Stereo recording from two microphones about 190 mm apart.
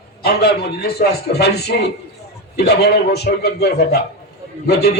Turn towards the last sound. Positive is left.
turn(degrees=60)  # may be behind; listen again after turning